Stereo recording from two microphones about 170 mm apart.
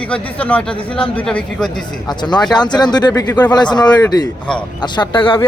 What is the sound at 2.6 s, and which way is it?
Speech, 25° left (ahead or behind).